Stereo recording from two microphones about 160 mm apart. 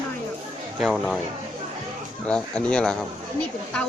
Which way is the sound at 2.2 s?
5° left (ahead or behind).